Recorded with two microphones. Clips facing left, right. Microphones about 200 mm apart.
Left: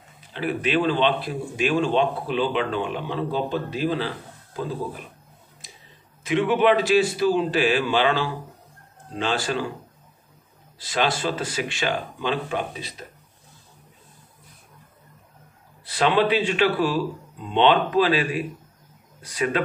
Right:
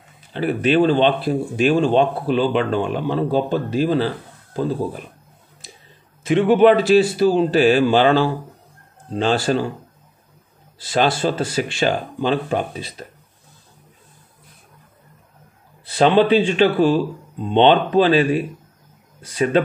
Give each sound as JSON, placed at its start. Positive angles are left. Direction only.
{"t": 0.3, "sound": "speech", "side_deg": -35}
{"t": 6.2, "sound": "speech", "side_deg": -35}
{"t": 10.9, "sound": "speech", "side_deg": -30}
{"t": 15.9, "sound": "speech", "side_deg": -30}